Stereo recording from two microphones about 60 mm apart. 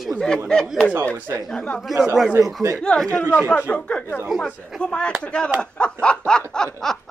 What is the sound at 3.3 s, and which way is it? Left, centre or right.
Speech, left.